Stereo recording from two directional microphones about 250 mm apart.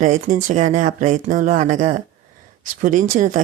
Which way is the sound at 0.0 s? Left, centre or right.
Right.